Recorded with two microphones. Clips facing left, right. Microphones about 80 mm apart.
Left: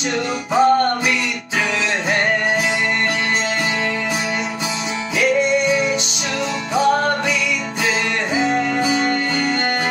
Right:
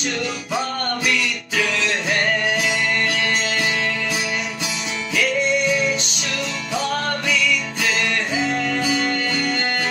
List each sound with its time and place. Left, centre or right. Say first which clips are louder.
0.6 s music: left 12 dB; left
6.7 s music: left 7 dB; left
8.4 s music: left 6 dB; left